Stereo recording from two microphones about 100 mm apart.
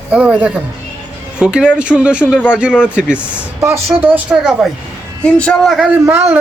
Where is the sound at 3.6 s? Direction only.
25° right (ahead or behind).